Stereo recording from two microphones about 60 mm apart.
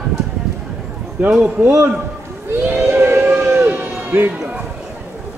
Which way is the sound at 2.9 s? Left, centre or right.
Right.